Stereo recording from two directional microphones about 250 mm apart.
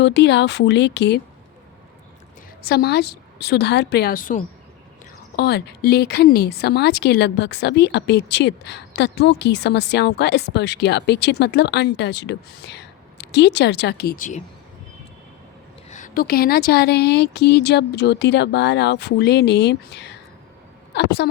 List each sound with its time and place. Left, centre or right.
0.0 s speech: left
2.6 s a woman's voice: left
15.9 s a woman's voice: left